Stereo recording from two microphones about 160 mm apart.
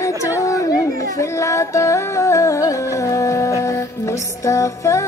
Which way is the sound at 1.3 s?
20° left (ahead or behind).